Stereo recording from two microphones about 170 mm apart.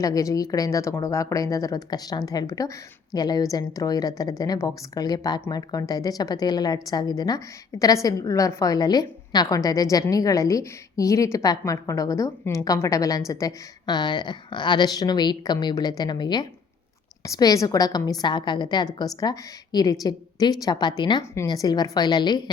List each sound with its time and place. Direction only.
0.0 s a woman's voice: 20° left (ahead or behind)